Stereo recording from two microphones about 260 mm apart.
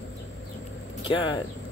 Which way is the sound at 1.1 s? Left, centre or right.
Centre.